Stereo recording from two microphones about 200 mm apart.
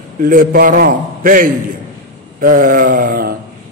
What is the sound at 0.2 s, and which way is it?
A man's voice, 45° right (ahead or behind).